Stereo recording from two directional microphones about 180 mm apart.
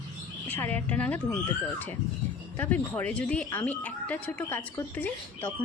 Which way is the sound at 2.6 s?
10° left (ahead or behind).